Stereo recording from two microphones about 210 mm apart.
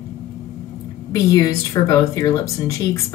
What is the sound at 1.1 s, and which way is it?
Speech, 15° left (ahead or behind).